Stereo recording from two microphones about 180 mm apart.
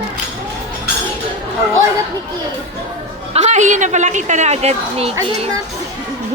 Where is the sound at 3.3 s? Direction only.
40° right (ahead or behind).